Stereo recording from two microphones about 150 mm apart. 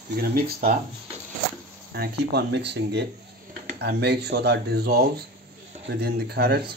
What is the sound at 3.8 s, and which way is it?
Speech, 90° right.